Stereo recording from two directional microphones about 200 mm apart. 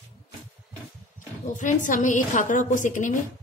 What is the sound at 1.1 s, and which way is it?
A woman's voice, 40° left (ahead or behind).